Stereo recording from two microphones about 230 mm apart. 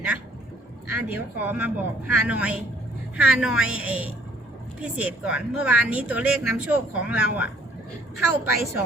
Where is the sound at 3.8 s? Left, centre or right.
Right.